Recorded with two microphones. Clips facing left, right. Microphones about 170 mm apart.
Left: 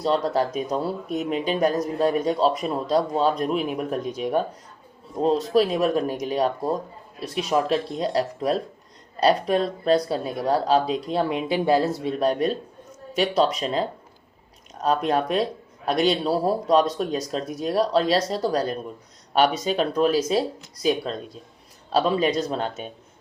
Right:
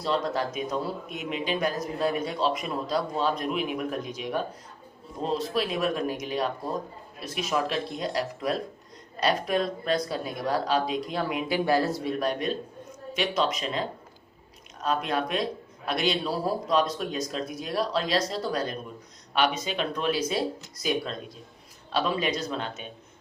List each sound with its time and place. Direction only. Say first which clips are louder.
0.0 s speech: left 5 dB; 40° left (ahead or behind)